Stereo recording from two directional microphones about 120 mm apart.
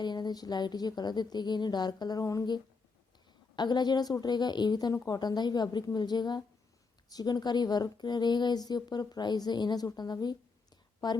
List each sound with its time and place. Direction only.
0.0 s speech: 35° left (ahead or behind)